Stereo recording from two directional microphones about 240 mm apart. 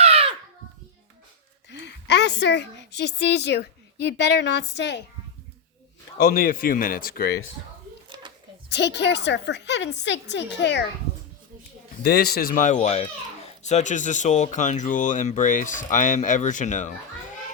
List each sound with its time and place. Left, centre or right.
0.0 s a sound: right
1.7 s a woman's voice: left
6.1 s speech: left
8.7 s a woman's voice: left
12.0 s speech: left